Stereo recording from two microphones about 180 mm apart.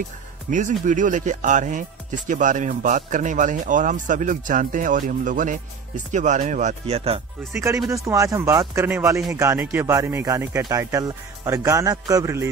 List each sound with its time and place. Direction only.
0.5 s speech: 45° right (ahead or behind)
7.9 s a man's voice: 15° right (ahead or behind)